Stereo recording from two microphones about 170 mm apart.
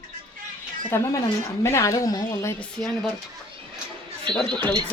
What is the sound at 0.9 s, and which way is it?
Speech, 15° left (ahead or behind).